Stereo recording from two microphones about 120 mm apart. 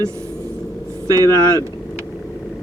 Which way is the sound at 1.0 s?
30° right (ahead or behind).